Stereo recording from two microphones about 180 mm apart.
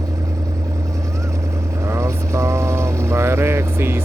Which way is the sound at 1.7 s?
15° right (ahead or behind).